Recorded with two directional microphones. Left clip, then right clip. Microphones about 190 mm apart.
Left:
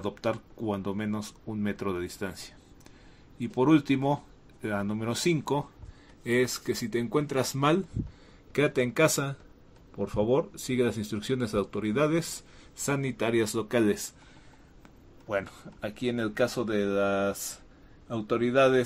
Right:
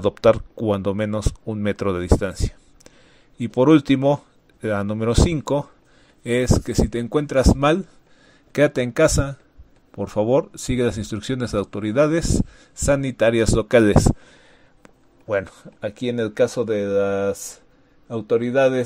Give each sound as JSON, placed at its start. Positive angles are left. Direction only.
{"t": 0.0, "sound": "speech", "side_deg": -40}
{"t": 14.8, "sound": "a man's voice", "side_deg": -30}